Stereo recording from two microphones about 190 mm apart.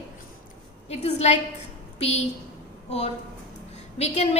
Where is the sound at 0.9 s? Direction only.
35° left (ahead or behind).